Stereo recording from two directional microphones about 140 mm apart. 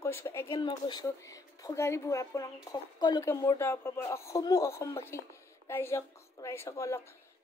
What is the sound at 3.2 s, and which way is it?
A woman's voice, 20° left (ahead or behind).